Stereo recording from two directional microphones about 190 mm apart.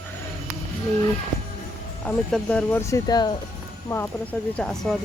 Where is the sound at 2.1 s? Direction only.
5° left (ahead or behind).